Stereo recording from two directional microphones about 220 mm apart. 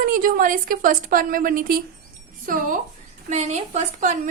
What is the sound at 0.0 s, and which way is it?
A woman's voice, 40° right (ahead or behind).